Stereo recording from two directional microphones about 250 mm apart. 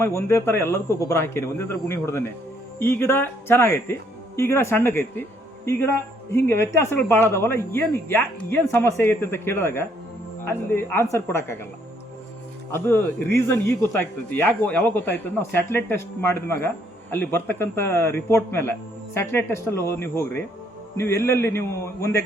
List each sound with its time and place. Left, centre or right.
0.0 s speech: centre
12.7 s speech: centre